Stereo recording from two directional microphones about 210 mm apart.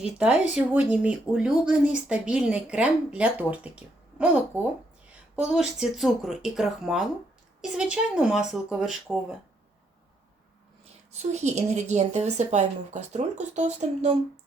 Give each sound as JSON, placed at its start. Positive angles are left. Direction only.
{"t": 0.0, "sound": "speech", "side_deg": -5}
{"t": 11.1, "sound": "a woman's voice", "side_deg": -30}